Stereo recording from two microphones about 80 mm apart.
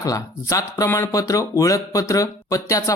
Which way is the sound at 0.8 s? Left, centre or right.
Left.